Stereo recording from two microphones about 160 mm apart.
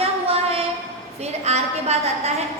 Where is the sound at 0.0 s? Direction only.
40° right (ahead or behind).